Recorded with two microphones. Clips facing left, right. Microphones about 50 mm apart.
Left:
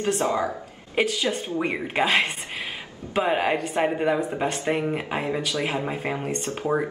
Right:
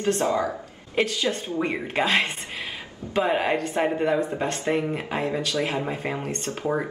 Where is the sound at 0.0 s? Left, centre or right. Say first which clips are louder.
Right 1 dB; left.